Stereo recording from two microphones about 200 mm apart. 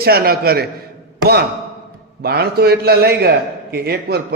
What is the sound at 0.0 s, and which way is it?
A man's voice, 50° right (ahead or behind).